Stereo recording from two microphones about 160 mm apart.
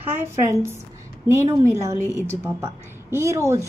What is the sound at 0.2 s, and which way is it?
A woman's voice, 15° right (ahead or behind).